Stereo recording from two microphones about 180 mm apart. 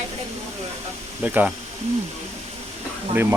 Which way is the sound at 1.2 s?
10° right (ahead or behind).